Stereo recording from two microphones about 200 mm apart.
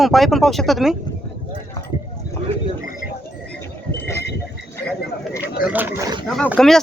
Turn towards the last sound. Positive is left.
turn(degrees=0)  # may be behind; listen again after turning